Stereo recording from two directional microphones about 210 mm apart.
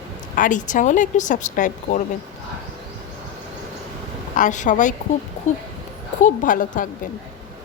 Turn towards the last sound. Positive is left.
turn(degrees=40)  # may be behind; listen again after turning